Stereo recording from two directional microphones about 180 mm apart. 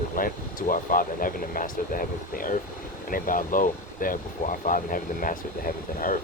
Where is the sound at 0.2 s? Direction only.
50° left (ahead or behind).